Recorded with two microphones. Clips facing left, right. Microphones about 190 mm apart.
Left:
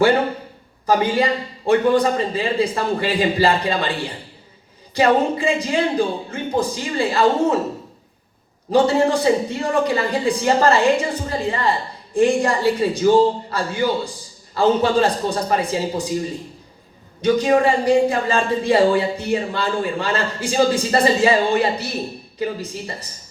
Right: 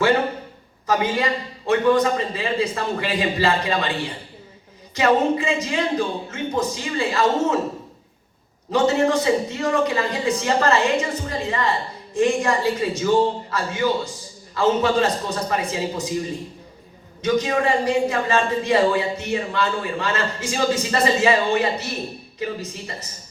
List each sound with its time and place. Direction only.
0.9 s speech: 35° left (ahead or behind)
4.9 s speech: 35° left (ahead or behind)
8.7 s speech: 35° left (ahead or behind)